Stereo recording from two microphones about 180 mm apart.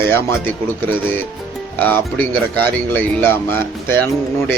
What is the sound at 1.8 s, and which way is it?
A man's voice, 10° left (ahead or behind).